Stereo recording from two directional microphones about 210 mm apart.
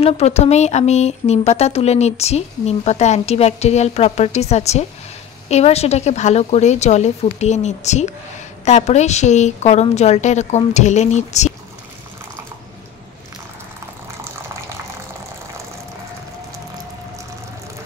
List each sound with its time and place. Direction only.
0.0 s speech: 30° left (ahead or behind)